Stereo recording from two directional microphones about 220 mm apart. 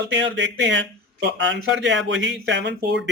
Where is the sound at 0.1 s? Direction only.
55° right (ahead or behind).